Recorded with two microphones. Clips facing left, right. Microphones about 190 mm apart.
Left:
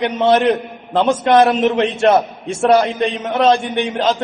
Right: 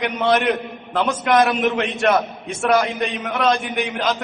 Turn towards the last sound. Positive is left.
turn(degrees=30)  # may be behind; listen again after turning